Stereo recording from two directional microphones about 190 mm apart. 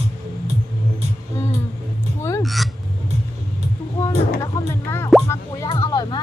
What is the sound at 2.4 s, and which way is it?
Hiccup, centre (ahead or behind).